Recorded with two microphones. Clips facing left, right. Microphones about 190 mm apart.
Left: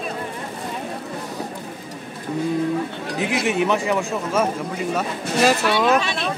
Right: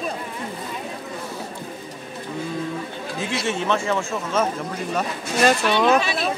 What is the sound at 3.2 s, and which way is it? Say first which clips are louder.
Speech: left 5 dB; 15° left (ahead or behind).